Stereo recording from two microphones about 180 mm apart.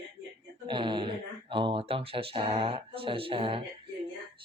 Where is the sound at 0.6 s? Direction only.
25° right (ahead or behind).